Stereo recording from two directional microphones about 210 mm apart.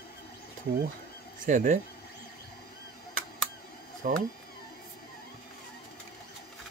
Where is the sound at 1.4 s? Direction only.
35° right (ahead or behind).